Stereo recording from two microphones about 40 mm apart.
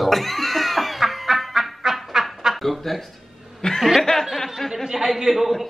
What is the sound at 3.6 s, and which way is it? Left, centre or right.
Speech, centre.